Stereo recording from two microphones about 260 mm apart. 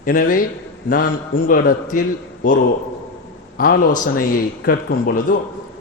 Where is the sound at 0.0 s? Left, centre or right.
Left.